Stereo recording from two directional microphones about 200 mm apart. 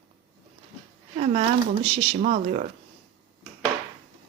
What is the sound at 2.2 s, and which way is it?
Speech, 40° right (ahead or behind).